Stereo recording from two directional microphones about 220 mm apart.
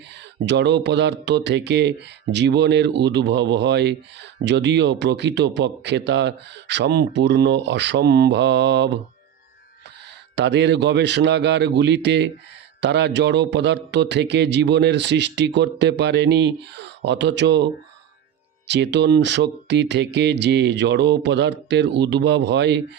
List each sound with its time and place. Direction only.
0.4 s speech: 50° right (ahead or behind)
10.3 s speech: 50° right (ahead or behind)
18.7 s speech: 50° right (ahead or behind)